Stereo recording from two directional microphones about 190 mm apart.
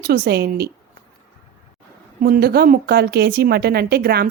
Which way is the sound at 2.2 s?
55° right (ahead or behind).